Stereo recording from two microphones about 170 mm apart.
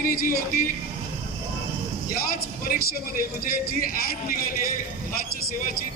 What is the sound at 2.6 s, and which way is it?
A man's voice, 55° left (ahead or behind).